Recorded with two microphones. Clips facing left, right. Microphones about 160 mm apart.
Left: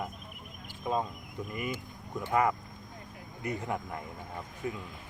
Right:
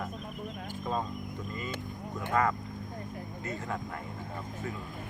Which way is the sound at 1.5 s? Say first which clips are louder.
Left 4 dB; 15° left (ahead or behind).